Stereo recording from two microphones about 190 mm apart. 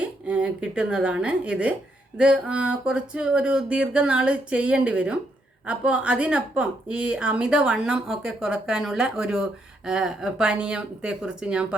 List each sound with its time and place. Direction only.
0.0 s speech: 5° right (ahead or behind)